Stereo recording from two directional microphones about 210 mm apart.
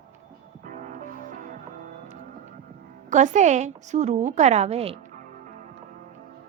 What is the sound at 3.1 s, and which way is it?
A woman's voice, 35° right (ahead or behind).